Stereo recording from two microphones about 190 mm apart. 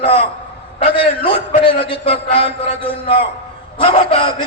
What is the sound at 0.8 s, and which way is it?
A man's voice, 40° left (ahead or behind).